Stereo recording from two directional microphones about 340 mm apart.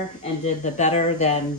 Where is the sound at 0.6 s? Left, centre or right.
Centre.